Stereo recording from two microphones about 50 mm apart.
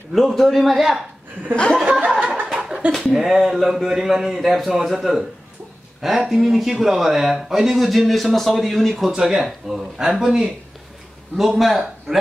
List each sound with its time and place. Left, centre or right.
0.1 s speech: centre
2.0 s snicker: centre
2.5 s a sound: centre
2.9 s speech: centre
9.1 s speech: centre